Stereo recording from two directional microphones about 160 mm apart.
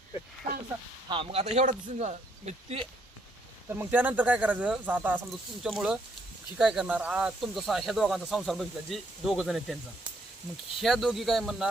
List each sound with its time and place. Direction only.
1.1 s speech: 35° right (ahead or behind)
3.7 s speech: 10° right (ahead or behind)
10.8 s speech: centre (ahead or behind)